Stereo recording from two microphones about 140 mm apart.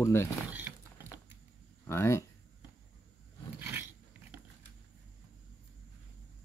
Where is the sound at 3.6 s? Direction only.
15° right (ahead or behind).